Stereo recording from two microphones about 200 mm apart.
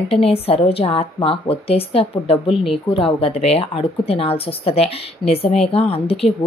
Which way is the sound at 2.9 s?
25° left (ahead or behind).